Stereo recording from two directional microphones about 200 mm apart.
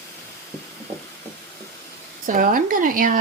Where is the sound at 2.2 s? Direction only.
40° right (ahead or behind).